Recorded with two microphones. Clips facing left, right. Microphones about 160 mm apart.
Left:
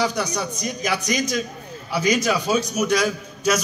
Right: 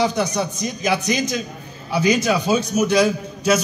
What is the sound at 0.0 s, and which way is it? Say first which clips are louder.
A man's voice: right 3 dB; 25° right (ahead or behind).